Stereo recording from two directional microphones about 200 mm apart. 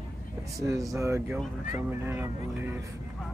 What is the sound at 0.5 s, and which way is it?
Speech, 15° right (ahead or behind).